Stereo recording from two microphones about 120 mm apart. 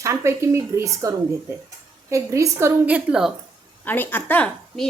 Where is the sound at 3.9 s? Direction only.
15° left (ahead or behind).